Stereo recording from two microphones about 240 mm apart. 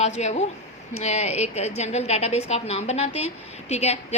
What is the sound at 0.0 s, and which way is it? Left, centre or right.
A woman's voice, left.